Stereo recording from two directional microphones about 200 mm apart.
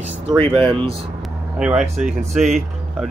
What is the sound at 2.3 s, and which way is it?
Speech, 35° right (ahead or behind).